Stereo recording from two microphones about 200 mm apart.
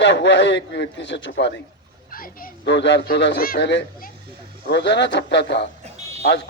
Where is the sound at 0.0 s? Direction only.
60° left (ahead or behind).